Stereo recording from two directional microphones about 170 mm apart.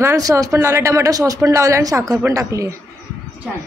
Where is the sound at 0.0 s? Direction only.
20° right (ahead or behind).